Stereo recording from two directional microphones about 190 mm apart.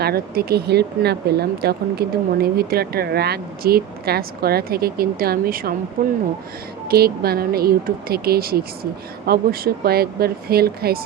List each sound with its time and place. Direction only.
0.0 s speech: 55° right (ahead or behind)